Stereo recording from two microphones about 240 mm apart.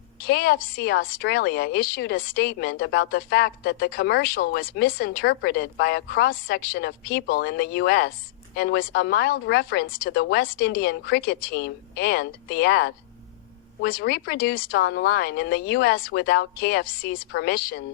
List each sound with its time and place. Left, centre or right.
0.3 s a woman's voice: left